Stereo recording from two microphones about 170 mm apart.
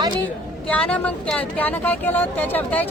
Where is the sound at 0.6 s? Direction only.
5° left (ahead or behind).